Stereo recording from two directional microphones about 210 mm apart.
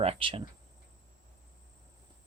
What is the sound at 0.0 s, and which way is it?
Speech, 25° right (ahead or behind).